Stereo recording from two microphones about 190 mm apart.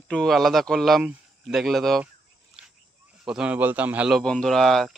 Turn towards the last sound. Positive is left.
turn(degrees=0)  # may be behind; listen again after turning